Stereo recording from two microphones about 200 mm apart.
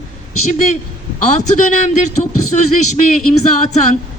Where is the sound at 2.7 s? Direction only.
40° left (ahead or behind).